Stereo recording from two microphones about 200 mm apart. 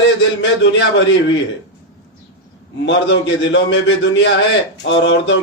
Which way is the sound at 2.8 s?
60° left (ahead or behind).